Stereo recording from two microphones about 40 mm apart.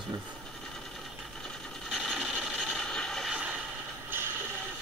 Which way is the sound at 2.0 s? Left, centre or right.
Centre.